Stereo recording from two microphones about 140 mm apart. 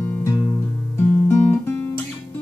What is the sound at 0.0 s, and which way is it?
Music, 20° left (ahead or behind).